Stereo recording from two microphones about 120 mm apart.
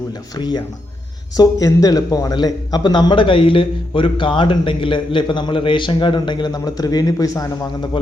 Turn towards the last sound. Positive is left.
turn(degrees=30)  # may be behind; listen again after turning